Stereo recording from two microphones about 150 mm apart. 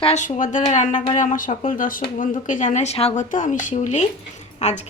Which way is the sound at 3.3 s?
60° left (ahead or behind).